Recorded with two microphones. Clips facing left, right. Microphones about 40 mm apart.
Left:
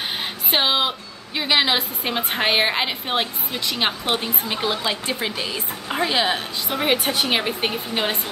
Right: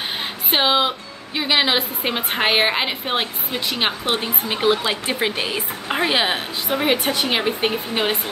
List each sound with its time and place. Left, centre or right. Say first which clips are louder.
0.5 s a woman's voice: right 2 dB; centre
3.5 s a woman's voice: right 1 dB; centre
6.8 s a woman's voice: even; centre
7.9 s a woman's voice: right 2 dB; centre